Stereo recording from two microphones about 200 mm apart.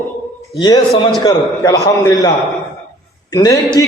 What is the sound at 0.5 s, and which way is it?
A man's voice, 20° left (ahead or behind).